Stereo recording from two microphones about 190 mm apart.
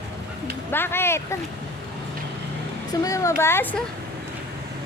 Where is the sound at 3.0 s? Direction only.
15° left (ahead or behind).